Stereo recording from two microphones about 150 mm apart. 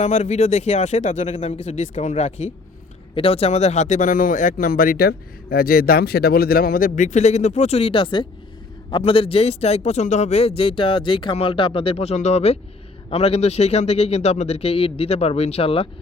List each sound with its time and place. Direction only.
0.0 s a man's voice: 50° left (ahead or behind)